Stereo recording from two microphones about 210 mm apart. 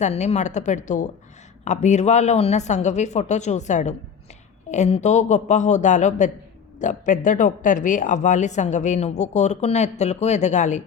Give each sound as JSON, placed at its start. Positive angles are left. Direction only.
{"t": 0.0, "sound": "speech", "side_deg": 30}